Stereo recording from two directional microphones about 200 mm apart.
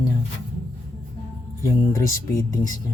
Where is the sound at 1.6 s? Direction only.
15° left (ahead or behind).